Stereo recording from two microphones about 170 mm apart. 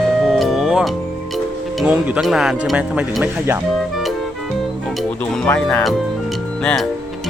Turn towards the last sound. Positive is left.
turn(degrees=5)  # may be behind; listen again after turning